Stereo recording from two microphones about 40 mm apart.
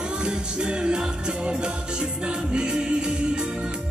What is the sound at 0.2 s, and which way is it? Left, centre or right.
Music, right.